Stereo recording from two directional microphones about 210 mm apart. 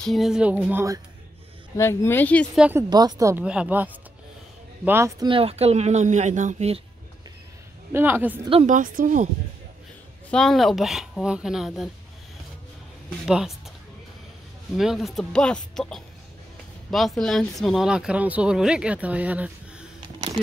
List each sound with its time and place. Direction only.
0.0 s speech: centre (ahead or behind)
1.8 s speech: 10° left (ahead or behind)
2.9 s speech: 20° right (ahead or behind)
5.3 s speech: 30° right (ahead or behind)
7.9 s speech: 10° right (ahead or behind)
8.5 s speech: 30° right (ahead or behind)
10.3 s speech: centre (ahead or behind)
13.3 s speech: 5° right (ahead or behind)
14.8 s speech: centre (ahead or behind)